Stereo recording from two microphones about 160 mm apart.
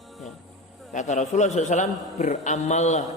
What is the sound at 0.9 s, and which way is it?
A man's voice, 45° left (ahead or behind).